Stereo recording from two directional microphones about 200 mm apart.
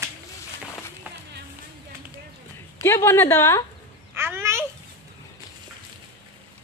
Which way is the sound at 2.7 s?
10° left (ahead or behind).